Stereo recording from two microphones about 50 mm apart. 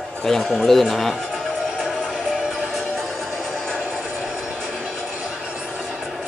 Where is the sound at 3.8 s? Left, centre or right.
Right.